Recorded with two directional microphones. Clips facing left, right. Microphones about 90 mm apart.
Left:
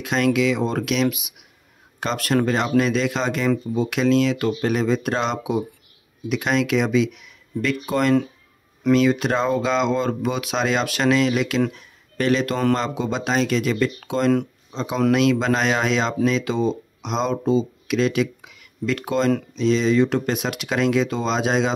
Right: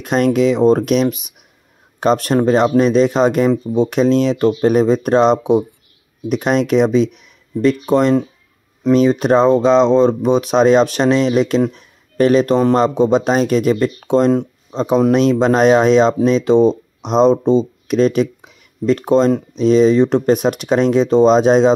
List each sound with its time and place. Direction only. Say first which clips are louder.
0.0 s speech: right 6 dB; 40° right (ahead or behind)
8.9 s speech: right 7 dB; 35° right (ahead or behind)
11.7 s a sound: right 5 dB; 40° right (ahead or behind)
12.7 s speech: right 11 dB; 40° right (ahead or behind)